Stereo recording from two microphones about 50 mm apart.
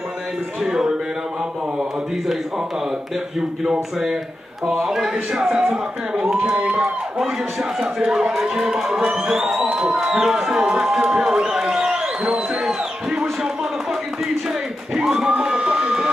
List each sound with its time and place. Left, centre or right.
0.6 s speech: centre
4.8 s speech: centre
6.4 s speech: right
6.8 s speech: centre
15.0 s a sound: centre